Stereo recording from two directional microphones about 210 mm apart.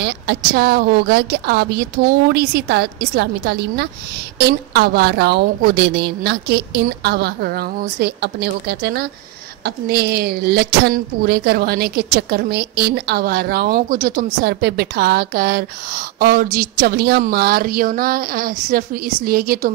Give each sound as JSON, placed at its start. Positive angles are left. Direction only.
{"t": 0.0, "sound": "a woman's voice", "side_deg": -50}